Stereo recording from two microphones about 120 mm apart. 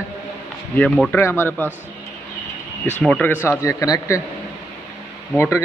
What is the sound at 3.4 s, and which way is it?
Speech, 30° left (ahead or behind).